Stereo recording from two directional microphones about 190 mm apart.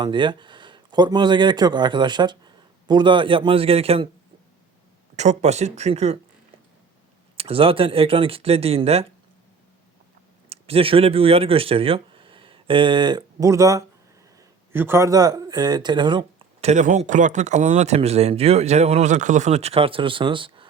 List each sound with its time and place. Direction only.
0.0 s speech: 25° right (ahead or behind)
5.1 s speech: 35° right (ahead or behind)
7.3 s speech: 30° right (ahead or behind)
10.5 s speech: 30° right (ahead or behind)